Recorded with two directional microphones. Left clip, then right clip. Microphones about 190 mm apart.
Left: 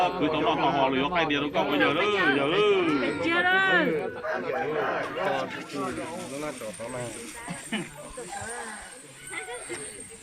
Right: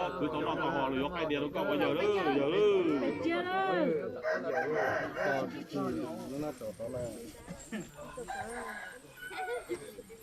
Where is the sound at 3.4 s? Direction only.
25° right (ahead or behind).